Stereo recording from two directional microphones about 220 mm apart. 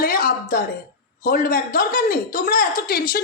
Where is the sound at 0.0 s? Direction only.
40° left (ahead or behind).